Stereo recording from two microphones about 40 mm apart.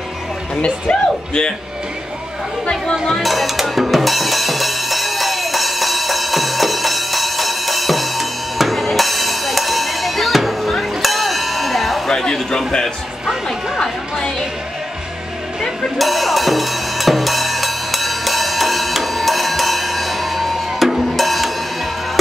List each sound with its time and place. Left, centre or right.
0.6 s speech: left
3.1 s music: centre
12.1 s a sound: centre
13.7 s chatter: centre
16.0 s drum kit: centre